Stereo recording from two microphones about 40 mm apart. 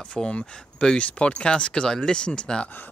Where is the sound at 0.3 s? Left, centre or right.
Left.